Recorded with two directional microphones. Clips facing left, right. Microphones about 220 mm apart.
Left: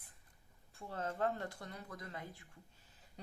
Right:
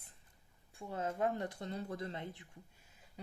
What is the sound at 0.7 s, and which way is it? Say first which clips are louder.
Speech: right 3 dB; 15° right (ahead or behind).